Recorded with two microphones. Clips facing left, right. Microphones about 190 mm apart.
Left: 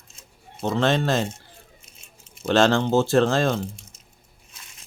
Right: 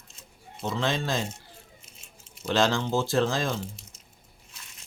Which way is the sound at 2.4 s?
70° left (ahead or behind).